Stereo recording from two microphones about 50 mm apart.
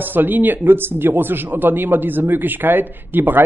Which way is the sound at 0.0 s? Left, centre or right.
Right.